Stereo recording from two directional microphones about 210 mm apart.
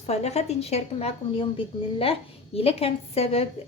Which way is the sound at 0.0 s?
30° left (ahead or behind).